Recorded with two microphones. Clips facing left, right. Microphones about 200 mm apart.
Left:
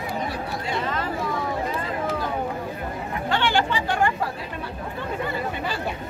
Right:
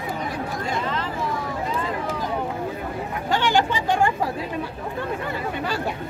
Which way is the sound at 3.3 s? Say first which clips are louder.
Right 2 dB; 45° right (ahead or behind).